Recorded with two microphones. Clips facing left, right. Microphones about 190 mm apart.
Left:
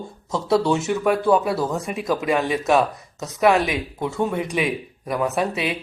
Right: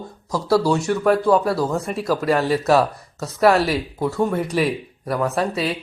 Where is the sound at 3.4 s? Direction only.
15° left (ahead or behind).